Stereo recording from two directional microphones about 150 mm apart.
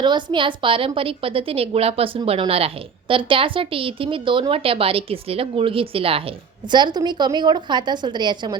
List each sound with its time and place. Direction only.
0.0 s a woman's voice: 30° right (ahead or behind)